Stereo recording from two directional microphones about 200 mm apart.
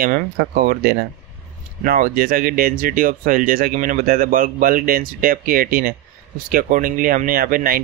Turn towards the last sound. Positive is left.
turn(degrees=-45)  # may be behind; listen again after turning